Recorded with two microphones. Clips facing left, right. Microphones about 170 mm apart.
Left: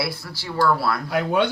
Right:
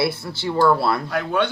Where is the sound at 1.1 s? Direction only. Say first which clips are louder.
Left 1 dB; 10° left (ahead or behind).